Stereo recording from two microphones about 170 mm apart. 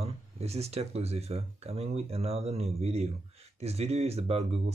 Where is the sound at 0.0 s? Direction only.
35° right (ahead or behind).